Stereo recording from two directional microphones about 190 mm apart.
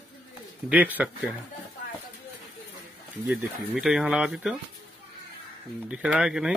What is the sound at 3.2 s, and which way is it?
Speech, 5° right (ahead or behind).